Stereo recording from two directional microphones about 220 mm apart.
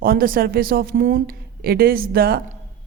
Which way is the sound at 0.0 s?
40° right (ahead or behind).